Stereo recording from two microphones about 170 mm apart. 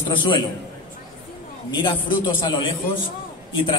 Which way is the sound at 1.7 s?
25° left (ahead or behind).